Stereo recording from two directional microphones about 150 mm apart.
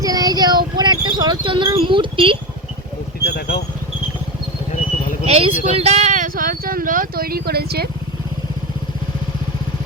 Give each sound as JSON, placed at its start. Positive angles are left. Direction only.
{"t": 0.0, "sound": "a sound", "side_deg": -25}
{"t": 3.2, "sound": "vehicle", "side_deg": 90}
{"t": 5.2, "sound": "speech", "side_deg": -40}